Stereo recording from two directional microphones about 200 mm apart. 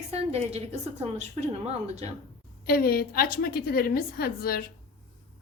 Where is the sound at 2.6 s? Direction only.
45° left (ahead or behind).